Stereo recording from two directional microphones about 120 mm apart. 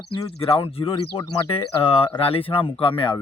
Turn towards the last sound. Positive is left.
turn(degrees=45)  # may be behind; listen again after turning